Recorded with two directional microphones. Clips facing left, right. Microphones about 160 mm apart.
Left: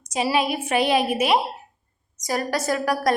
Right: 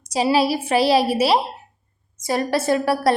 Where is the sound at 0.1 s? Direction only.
35° right (ahead or behind).